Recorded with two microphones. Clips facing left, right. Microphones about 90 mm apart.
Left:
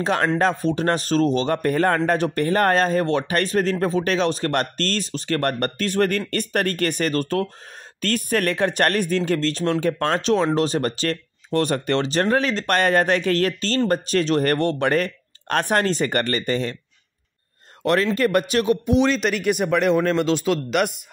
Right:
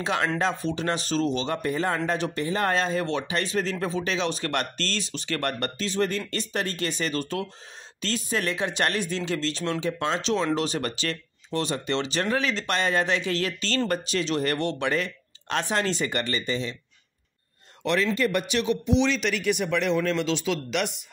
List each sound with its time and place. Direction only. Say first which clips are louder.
0.0 s speech: left 5 dB; 45° left (ahead or behind)
17.8 s speech: left 5 dB; 50° left (ahead or behind)